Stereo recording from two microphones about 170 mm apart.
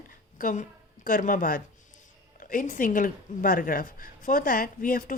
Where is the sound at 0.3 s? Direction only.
55° left (ahead or behind).